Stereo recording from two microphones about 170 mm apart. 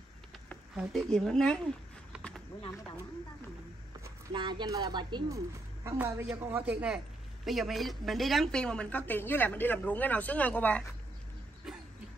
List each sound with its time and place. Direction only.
0.7 s speech: centre (ahead or behind)
4.3 s a woman's voice: 25° right (ahead or behind); by 10.9 s 10° left (ahead or behind)